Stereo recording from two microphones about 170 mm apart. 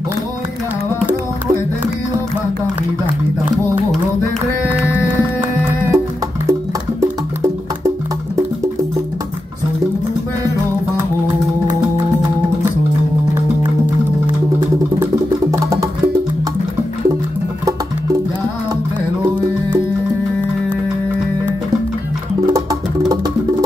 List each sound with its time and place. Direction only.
5.4 s music: 10° right (ahead or behind)
15.5 s music: 20° right (ahead or behind)
22.5 s music: 20° right (ahead or behind)